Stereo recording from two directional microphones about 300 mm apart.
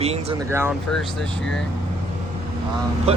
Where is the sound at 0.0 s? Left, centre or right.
Right.